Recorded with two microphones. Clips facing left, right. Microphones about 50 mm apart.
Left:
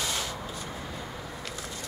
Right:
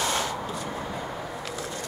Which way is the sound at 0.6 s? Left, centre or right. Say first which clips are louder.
Right 6 dB; right.